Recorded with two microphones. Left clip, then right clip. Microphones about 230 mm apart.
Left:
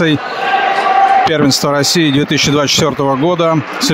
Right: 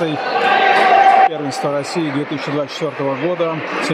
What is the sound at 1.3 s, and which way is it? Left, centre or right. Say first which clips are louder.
Speech: left 7 dB; left.